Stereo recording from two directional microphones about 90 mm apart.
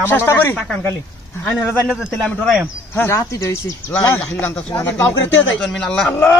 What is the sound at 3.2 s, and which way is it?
Speech, 35° left (ahead or behind).